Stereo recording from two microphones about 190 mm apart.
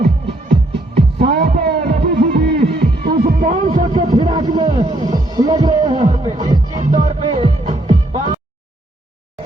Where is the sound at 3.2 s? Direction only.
45° right (ahead or behind).